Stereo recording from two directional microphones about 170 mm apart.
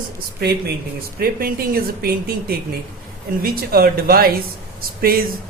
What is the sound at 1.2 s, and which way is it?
Speech, 60° right (ahead or behind).